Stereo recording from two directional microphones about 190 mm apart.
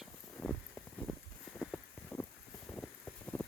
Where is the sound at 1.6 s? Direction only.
5° left (ahead or behind).